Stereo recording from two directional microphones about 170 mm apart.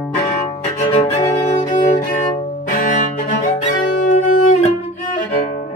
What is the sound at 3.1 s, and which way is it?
Music, 40° left (ahead or behind).